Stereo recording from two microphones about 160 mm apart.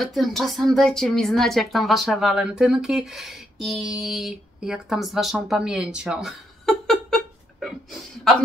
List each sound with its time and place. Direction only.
0.0 s a woman's voice: centre (ahead or behind)